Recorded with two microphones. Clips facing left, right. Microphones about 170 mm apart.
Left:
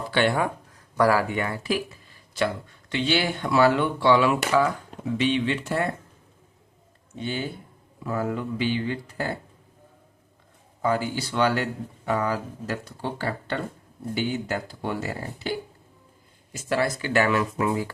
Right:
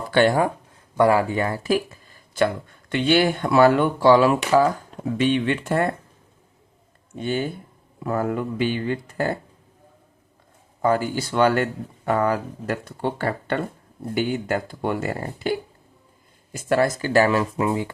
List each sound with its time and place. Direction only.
0.1 s speech: 40° right (ahead or behind)
0.9 s speech: 25° right (ahead or behind); by 5.9 s 50° right (ahead or behind)
7.2 s speech: 45° right (ahead or behind)
10.8 s speech: 45° right (ahead or behind); by 17.9 s 25° right (ahead or behind)